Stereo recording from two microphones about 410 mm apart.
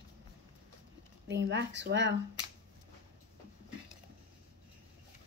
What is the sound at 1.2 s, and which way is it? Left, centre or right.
Speech, right.